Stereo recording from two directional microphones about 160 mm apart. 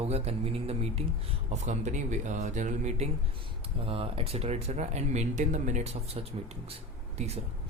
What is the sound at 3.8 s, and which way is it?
A man's voice, 35° right (ahead or behind).